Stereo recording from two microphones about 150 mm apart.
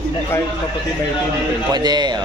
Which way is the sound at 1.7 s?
25° right (ahead or behind).